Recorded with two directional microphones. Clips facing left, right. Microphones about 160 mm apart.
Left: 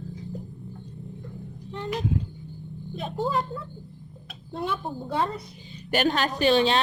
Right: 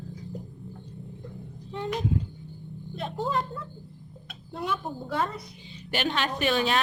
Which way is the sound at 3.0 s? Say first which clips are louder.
Left 2 dB; 5° left (ahead or behind).